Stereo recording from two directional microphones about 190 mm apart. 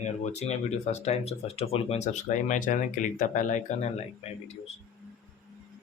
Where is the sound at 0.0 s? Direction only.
40° left (ahead or behind).